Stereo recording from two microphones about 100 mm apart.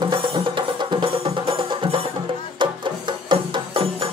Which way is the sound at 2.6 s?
55° right (ahead or behind).